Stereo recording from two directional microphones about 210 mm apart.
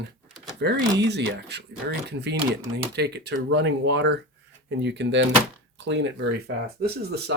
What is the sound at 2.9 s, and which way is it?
Speech, 50° right (ahead or behind).